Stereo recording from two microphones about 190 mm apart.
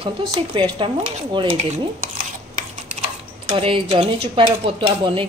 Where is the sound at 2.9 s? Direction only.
35° right (ahead or behind).